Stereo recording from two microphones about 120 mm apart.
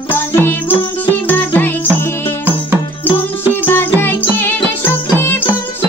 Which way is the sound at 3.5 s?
20° left (ahead or behind).